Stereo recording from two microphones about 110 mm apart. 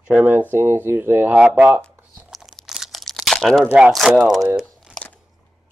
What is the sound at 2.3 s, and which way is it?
Crunch, centre (ahead or behind).